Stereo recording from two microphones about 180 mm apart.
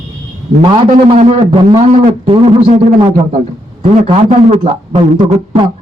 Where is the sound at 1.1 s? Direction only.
35° right (ahead or behind).